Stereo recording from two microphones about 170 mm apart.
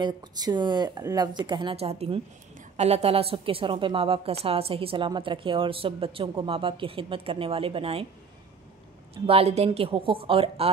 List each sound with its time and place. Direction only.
0.0 s a woman's voice: 25° right (ahead or behind)
9.1 s a woman's voice: 35° right (ahead or behind)